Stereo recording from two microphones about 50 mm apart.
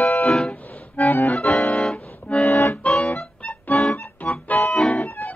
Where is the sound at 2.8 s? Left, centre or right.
Centre.